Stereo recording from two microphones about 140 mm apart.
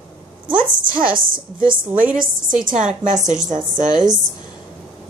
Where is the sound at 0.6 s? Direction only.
75° right (ahead or behind).